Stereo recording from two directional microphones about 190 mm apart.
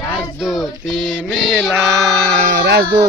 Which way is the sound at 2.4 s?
65° right (ahead or behind).